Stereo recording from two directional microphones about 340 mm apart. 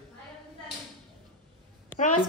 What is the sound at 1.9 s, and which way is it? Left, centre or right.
Speech, left.